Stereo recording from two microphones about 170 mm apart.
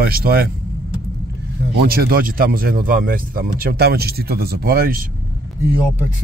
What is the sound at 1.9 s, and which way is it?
Speech, 60° right (ahead or behind).